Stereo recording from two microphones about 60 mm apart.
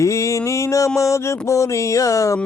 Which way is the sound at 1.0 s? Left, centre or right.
Left.